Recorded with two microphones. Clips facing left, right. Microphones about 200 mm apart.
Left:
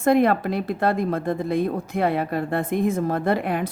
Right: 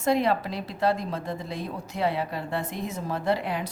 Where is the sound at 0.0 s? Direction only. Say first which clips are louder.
Left 6 dB; 55° left (ahead or behind).